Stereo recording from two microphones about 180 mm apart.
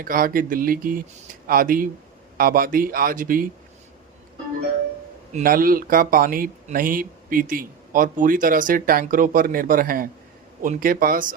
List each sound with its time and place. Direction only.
0.0 s speech: 50° right (ahead or behind)
5.3 s speech: 50° right (ahead or behind)